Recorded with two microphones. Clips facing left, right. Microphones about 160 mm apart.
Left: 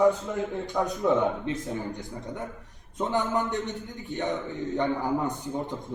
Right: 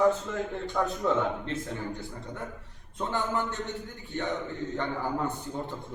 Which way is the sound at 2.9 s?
20° left (ahead or behind).